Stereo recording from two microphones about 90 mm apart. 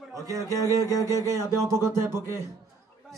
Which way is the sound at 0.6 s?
35° right (ahead or behind).